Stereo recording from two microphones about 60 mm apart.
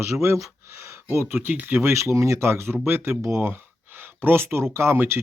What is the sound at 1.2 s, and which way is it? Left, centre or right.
Speech, right.